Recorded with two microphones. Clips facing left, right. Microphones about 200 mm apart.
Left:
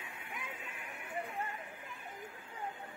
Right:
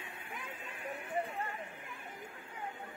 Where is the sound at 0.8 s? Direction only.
30° right (ahead or behind).